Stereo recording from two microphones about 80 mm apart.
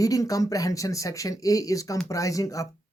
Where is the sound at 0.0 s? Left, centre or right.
Left.